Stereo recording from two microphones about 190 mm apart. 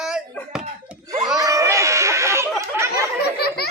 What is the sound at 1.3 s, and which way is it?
Chatter, 15° right (ahead or behind).